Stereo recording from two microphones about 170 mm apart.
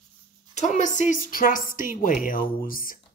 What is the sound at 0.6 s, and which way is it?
A woman's voice, 45° left (ahead or behind).